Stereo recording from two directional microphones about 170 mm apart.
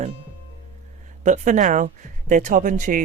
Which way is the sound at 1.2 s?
45° right (ahead or behind).